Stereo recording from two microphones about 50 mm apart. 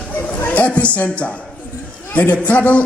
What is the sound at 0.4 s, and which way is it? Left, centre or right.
A woman's voice, left.